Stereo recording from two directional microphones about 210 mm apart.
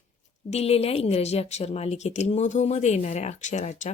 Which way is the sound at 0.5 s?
30° left (ahead or behind).